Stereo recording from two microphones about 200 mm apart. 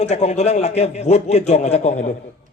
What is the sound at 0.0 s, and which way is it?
A man's voice, 35° left (ahead or behind).